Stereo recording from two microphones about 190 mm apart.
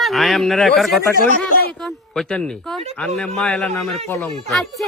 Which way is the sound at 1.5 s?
55° left (ahead or behind).